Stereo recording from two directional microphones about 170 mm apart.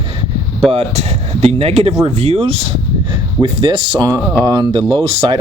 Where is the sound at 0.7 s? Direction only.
35° right (ahead or behind).